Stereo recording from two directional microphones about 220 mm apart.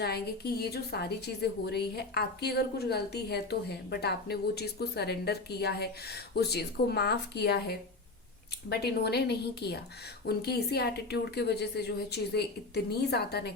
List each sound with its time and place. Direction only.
0.0 s a woman's voice: 45° left (ahead or behind)